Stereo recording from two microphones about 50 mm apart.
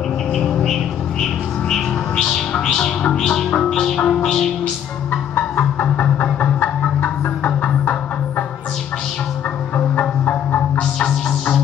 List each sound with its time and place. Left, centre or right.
0.3 s bird: centre
1.2 s music: centre
6.4 s a sound: left
7.4 s music: left
9.8 s music: left
10.8 s music: centre